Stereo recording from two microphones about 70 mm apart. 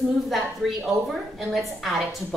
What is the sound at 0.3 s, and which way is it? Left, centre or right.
A woman's voice, centre.